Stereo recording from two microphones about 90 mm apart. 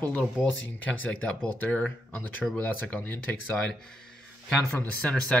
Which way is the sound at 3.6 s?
5° left (ahead or behind).